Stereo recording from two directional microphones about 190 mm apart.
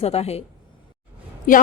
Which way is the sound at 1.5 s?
45° left (ahead or behind).